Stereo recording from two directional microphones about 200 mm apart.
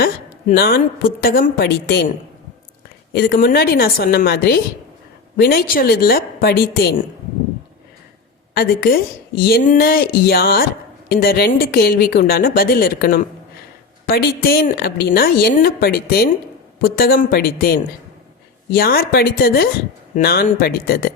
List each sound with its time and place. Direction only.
0.0 s a woman's voice: 50° left (ahead or behind)
8.5 s a woman's voice: 50° left (ahead or behind)